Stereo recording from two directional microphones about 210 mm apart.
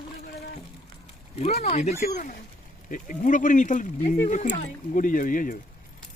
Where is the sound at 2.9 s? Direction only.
40° left (ahead or behind).